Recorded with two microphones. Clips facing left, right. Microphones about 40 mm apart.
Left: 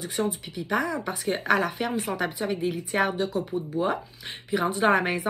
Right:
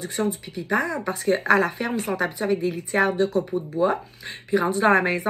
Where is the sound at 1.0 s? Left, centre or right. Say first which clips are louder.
Right 6 dB; left.